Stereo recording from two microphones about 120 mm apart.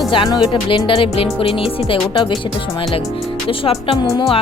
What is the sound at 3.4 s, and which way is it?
Speech, 50° left (ahead or behind).